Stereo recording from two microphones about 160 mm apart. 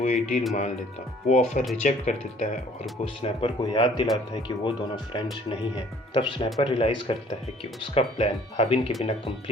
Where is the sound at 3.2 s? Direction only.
35° left (ahead or behind).